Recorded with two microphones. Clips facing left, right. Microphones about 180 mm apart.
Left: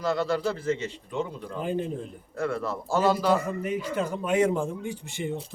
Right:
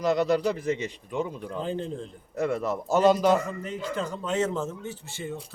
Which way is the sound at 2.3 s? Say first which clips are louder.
Right 2 dB; 20° right (ahead or behind).